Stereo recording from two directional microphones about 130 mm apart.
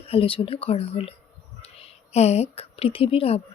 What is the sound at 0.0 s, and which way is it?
A woman's voice, 45° left (ahead or behind).